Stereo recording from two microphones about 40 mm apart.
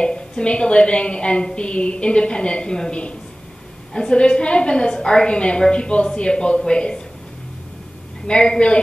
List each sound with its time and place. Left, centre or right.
0.0 s a woman's voice: left
8.3 s a woman's voice: left